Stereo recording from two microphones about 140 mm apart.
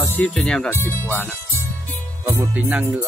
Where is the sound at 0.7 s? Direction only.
15° left (ahead or behind).